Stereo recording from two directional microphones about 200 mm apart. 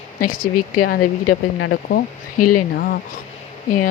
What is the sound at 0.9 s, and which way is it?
Speech, 55° left (ahead or behind).